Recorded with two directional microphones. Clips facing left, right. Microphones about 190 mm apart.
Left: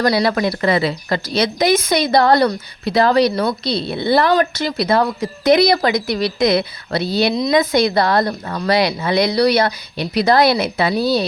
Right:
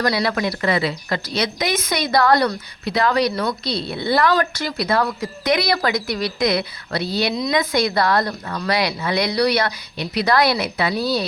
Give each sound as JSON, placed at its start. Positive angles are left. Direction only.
{"t": 0.0, "sound": "a woman's voice", "side_deg": 30}